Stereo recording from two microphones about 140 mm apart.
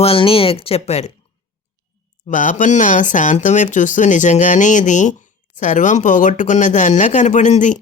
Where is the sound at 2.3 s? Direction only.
70° left (ahead or behind).